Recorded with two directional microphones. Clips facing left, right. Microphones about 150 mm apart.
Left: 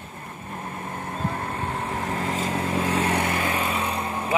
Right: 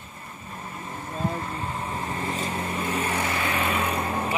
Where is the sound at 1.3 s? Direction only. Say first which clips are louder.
Left 2 dB; 60° left (ahead or behind).